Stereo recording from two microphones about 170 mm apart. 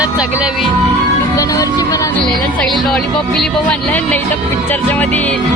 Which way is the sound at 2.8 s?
Centre (ahead or behind).